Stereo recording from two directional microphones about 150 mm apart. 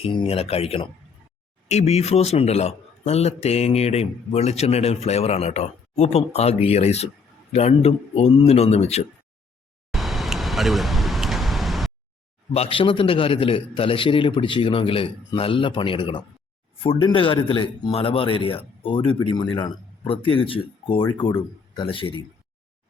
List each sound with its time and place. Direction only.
0.0 s a man's voice: 35° left (ahead or behind)
9.9 s a sound: centre (ahead or behind)
12.5 s a man's voice: 35° left (ahead or behind)